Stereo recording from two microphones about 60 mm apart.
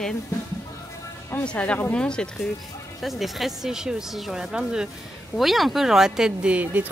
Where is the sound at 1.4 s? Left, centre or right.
Centre.